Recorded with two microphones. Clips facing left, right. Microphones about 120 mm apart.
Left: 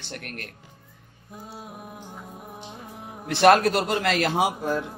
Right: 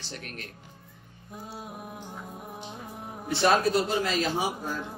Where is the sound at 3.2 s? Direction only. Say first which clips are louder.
Left 6 dB; 70° left (ahead or behind); by 4.8 s 90° left.